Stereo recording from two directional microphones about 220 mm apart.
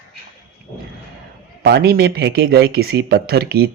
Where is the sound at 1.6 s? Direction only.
45° right (ahead or behind).